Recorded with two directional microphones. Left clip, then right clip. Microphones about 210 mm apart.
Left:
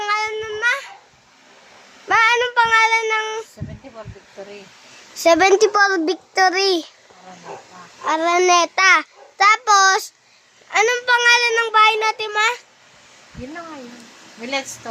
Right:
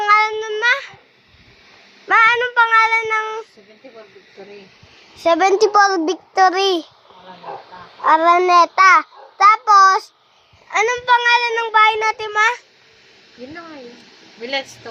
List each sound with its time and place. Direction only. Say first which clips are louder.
0.0 s child singing: right 7 dB; 20° right (ahead or behind)
2.0 s child singing: right 2 dB; centre (ahead or behind)
5.1 s a child's voice: left 1 dB; 20° left (ahead or behind)
8.0 s a child's voice: right 6 dB; centre (ahead or behind)
8.4 s child singing: right 3 dB; 10° left (ahead or behind)
10.7 s a child's voice: right 1 dB; 10° left (ahead or behind)